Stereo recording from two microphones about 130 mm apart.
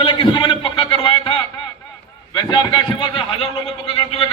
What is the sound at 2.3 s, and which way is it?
A man's voice, 35° left (ahead or behind).